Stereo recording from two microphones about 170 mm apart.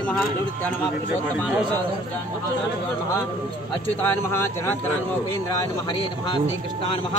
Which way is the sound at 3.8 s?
15° left (ahead or behind).